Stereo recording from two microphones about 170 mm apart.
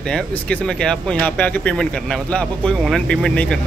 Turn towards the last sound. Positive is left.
turn(degrees=5)  # may be behind; listen again after turning